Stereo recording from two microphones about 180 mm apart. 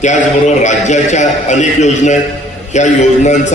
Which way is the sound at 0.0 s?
40° left (ahead or behind).